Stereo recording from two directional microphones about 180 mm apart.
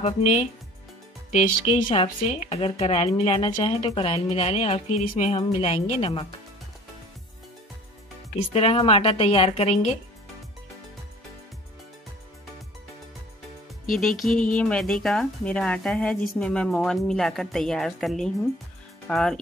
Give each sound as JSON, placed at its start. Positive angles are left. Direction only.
{"t": 0.0, "sound": "speech", "side_deg": 40}
{"t": 8.5, "sound": "speech", "side_deg": 30}
{"t": 13.8, "sound": "a woman's voice", "side_deg": 0}